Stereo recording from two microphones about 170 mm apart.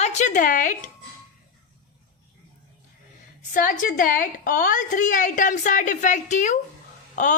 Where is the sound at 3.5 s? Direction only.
50° left (ahead or behind).